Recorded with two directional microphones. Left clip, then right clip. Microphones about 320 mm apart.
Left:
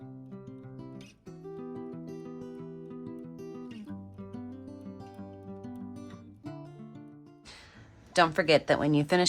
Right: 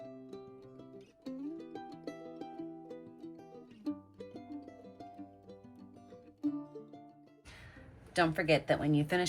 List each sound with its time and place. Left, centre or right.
0.0 s music: centre
8.1 s speech: centre